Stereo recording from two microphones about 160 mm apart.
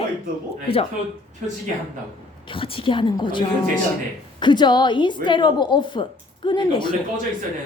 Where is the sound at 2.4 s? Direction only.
35° left (ahead or behind).